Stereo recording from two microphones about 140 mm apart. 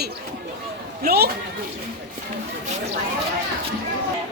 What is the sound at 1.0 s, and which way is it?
Speech, 90° right.